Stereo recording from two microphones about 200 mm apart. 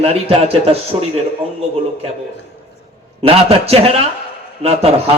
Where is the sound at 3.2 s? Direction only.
30° right (ahead or behind).